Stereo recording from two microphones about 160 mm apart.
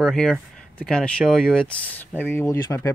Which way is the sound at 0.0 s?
Centre (ahead or behind).